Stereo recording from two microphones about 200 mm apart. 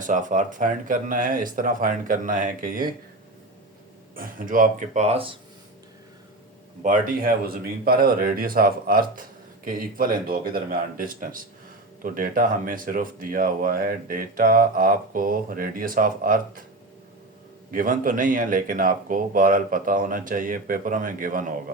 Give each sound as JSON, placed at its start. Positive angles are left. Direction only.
{"t": 0.0, "sound": "speech", "side_deg": -40}
{"t": 4.1, "sound": "speech", "side_deg": -45}
{"t": 6.8, "sound": "speech", "side_deg": -40}
{"t": 17.7, "sound": "speech", "side_deg": -45}